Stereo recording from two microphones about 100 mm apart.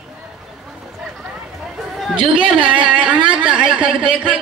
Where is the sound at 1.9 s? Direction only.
Centre (ahead or behind).